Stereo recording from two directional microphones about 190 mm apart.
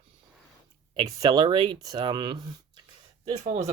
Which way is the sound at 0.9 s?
20° right (ahead or behind).